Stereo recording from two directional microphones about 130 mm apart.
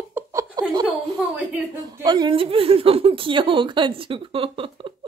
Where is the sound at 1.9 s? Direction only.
30° right (ahead or behind).